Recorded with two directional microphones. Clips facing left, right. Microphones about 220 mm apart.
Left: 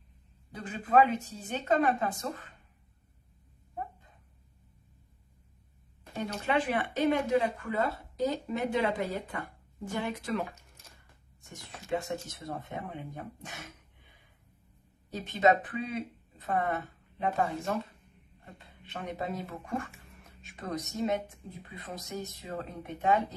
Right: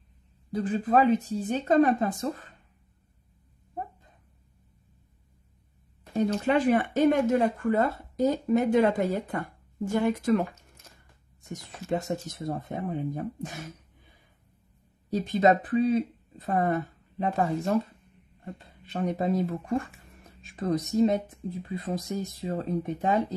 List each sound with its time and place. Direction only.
0.5 s speech: 35° right (ahead or behind)
6.1 s speech: 40° right (ahead or behind)
11.4 s speech: 40° right (ahead or behind)
15.0 s speech: 35° right (ahead or behind)